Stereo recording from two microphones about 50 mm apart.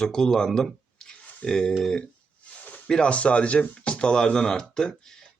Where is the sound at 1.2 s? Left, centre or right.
Centre.